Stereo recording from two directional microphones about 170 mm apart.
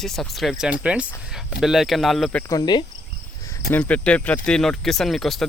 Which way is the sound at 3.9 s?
5° left (ahead or behind).